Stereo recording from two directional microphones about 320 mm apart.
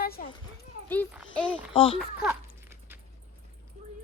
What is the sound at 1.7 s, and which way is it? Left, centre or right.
Speech, centre.